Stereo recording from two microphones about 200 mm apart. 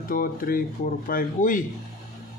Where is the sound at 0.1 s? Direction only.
45° left (ahead or behind).